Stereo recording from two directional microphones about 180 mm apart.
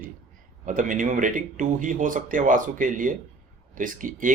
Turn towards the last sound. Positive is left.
turn(degrees=-45)  # may be behind; listen again after turning